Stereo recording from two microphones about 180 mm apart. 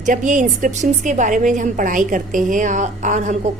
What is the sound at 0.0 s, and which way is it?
A woman's voice, 45° right (ahead or behind).